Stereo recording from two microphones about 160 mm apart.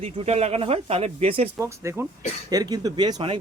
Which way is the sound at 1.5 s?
15° right (ahead or behind).